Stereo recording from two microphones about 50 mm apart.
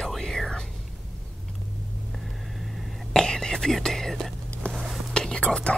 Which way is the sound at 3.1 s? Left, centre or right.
Centre.